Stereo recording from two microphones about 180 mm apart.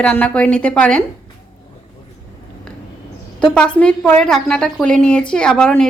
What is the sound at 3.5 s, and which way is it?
A woman's voice, 5° left (ahead or behind).